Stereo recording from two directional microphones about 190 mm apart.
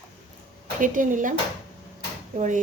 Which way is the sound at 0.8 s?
45° right (ahead or behind).